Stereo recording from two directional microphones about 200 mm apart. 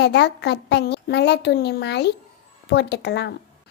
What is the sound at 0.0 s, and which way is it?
A woman's voice, 55° left (ahead or behind).